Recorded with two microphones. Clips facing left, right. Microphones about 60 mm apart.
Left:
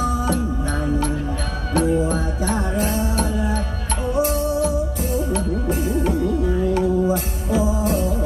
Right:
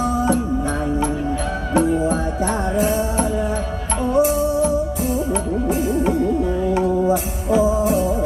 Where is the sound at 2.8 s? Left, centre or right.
Centre.